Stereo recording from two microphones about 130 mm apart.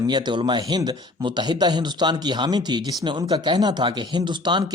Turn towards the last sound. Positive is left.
turn(degrees=-35)  # may be behind; listen again after turning